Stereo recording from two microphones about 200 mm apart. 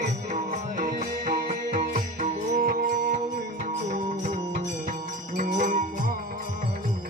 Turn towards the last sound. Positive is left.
turn(degrees=-40)  # may be behind; listen again after turning